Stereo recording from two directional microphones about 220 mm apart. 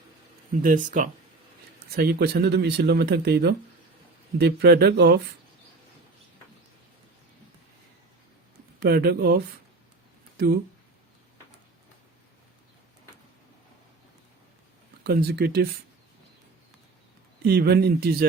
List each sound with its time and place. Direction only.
0.6 s speech: 35° right (ahead or behind)
2.0 s speech: 45° right (ahead or behind)
8.8 s speech: 45° right (ahead or behind)
15.0 s speech: 45° right (ahead or behind)
17.4 s speech: 45° right (ahead or behind)